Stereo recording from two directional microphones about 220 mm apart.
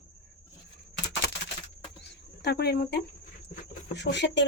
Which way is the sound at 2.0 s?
45° left (ahead or behind).